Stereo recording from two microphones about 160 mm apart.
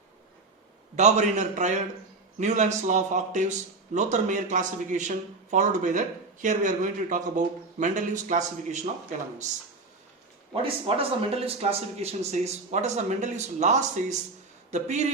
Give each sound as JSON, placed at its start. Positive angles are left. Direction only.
{"t": 0.9, "sound": "a man's voice", "side_deg": -45}
{"t": 10.5, "sound": "a man's voice", "side_deg": -35}